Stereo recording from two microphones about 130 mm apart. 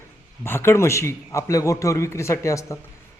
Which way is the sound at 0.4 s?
20° left (ahead or behind).